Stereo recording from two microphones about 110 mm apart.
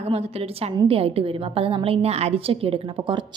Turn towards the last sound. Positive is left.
turn(degrees=-55)  # may be behind; listen again after turning